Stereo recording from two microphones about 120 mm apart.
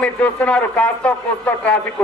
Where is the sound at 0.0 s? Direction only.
10° left (ahead or behind).